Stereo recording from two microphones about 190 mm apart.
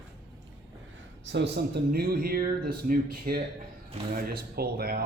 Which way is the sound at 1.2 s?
65° right (ahead or behind).